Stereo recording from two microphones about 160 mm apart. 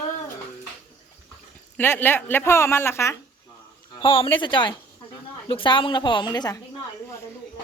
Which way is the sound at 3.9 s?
35° left (ahead or behind).